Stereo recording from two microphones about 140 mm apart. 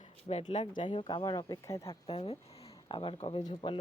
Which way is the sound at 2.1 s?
45° left (ahead or behind).